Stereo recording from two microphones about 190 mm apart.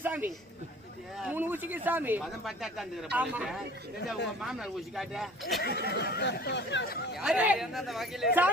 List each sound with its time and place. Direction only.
0.0 s a sound: 10° right (ahead or behind)
1.2 s speech: 10° right (ahead or behind)
5.9 s speech: 60° left (ahead or behind)
7.2 s speech: 5° right (ahead or behind)